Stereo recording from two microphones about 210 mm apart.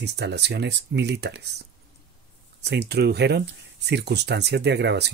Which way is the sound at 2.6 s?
55° right (ahead or behind).